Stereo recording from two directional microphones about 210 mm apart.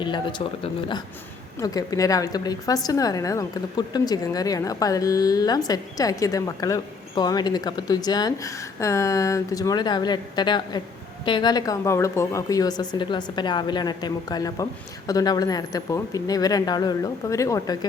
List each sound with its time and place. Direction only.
0.0 s a woman's voice: 20° left (ahead or behind)